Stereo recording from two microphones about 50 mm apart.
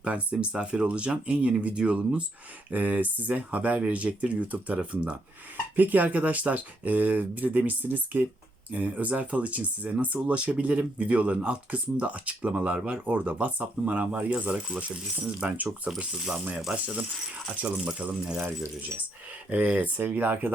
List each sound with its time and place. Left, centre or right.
0.0 s speech: right
5.7 s speech: right
16.1 s speech: centre
16.7 s speech: right
19.5 s speech: right